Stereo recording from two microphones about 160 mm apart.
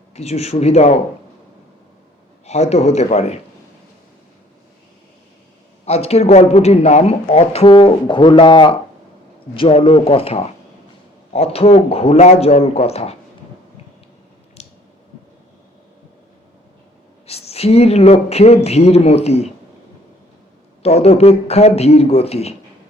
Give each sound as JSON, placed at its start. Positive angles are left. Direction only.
{"t": 0.1, "sound": "a man's voice", "side_deg": 40}
{"t": 2.5, "sound": "a man's voice", "side_deg": 45}
{"t": 5.8, "sound": "speech", "side_deg": 40}
{"t": 14.6, "sound": "a sound", "side_deg": 40}
{"t": 17.2, "sound": "speech", "side_deg": 40}
{"t": 20.8, "sound": "speech", "side_deg": 40}